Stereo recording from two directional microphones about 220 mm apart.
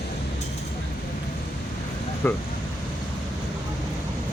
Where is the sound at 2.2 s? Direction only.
10° left (ahead or behind).